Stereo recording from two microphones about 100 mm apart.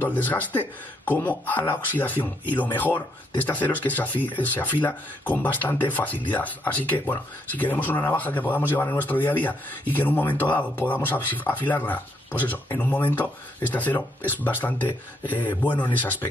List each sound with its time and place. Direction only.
0.0 s speech: 15° left (ahead or behind)